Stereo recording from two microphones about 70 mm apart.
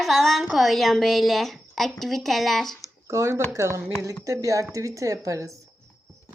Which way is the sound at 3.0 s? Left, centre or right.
Right.